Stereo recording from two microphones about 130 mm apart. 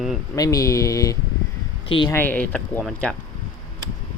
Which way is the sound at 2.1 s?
15° left (ahead or behind).